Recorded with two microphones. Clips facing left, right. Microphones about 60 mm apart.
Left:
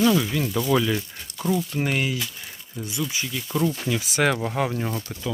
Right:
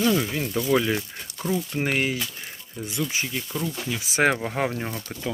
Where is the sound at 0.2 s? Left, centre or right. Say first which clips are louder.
Left 2 dB; right.